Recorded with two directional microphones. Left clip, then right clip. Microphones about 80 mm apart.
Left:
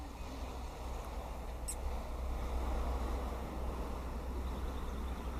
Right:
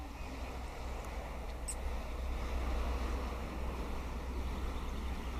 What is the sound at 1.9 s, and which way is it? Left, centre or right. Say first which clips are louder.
Waves: even; right.